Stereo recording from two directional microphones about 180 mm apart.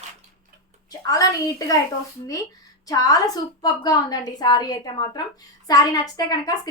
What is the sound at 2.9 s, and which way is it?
A woman's voice, 20° left (ahead or behind).